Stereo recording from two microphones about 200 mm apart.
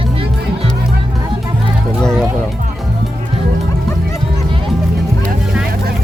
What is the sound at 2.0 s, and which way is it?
Music, 5° left (ahead or behind).